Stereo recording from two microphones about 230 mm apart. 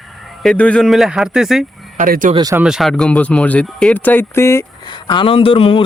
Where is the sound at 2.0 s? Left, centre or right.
Right.